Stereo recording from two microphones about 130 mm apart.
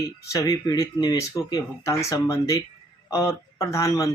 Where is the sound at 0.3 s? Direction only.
30° left (ahead or behind).